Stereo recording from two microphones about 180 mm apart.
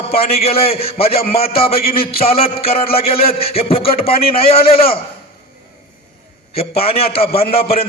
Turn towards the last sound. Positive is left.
turn(degrees=35)  # may be behind; listen again after turning